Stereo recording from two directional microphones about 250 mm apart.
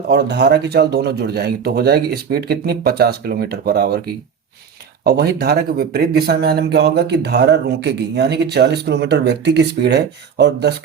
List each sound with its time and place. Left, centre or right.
0.1 s speech: right